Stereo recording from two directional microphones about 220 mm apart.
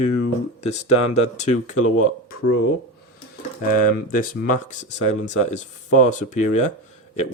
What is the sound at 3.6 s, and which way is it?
Speech, 40° left (ahead or behind).